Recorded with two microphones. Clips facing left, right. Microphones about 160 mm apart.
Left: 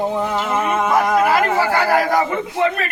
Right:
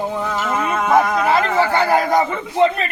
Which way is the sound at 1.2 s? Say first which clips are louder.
Even; 25° right (ahead or behind).